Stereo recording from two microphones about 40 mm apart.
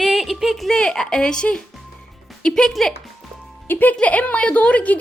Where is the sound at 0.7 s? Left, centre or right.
Centre.